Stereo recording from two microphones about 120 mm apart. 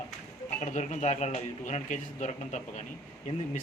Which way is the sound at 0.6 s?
85° left.